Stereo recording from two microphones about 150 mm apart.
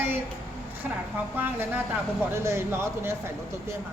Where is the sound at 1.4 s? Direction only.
10° right (ahead or behind).